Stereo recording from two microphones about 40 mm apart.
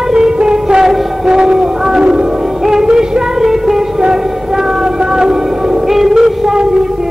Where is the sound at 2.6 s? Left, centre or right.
Centre.